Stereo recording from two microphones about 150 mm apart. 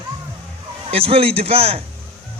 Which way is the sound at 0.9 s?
40° right (ahead or behind).